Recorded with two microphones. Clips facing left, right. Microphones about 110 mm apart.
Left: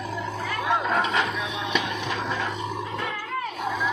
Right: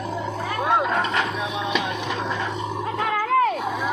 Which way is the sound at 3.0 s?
90° right.